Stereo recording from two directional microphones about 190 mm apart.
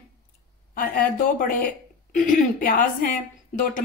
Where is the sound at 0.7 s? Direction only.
50° left (ahead or behind).